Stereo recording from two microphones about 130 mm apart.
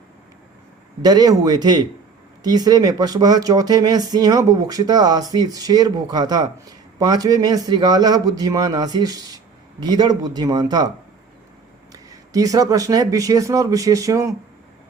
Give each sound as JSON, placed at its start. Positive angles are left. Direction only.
{"t": 1.0, "sound": "speech", "side_deg": -30}
{"t": 11.9, "sound": "speech", "side_deg": -25}